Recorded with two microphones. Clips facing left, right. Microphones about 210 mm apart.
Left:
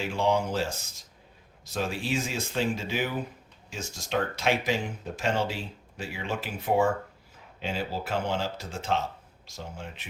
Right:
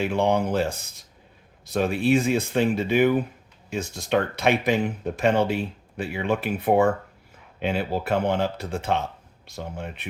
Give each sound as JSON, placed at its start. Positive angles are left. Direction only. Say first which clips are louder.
{"t": 0.0, "sound": "speech", "louder": "right 4 dB", "side_deg": -60}